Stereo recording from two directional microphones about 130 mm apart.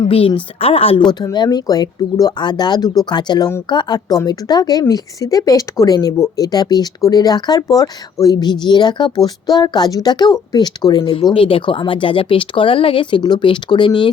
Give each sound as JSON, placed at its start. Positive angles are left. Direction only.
{"t": 0.1, "sound": "a woman's voice", "side_deg": 45}
{"t": 1.2, "sound": "speech", "side_deg": 30}